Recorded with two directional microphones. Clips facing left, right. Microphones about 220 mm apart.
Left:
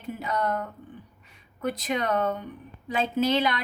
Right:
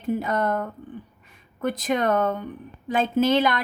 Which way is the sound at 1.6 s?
50° right (ahead or behind).